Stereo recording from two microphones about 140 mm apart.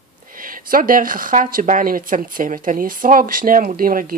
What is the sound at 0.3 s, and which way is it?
Speech, 80° right.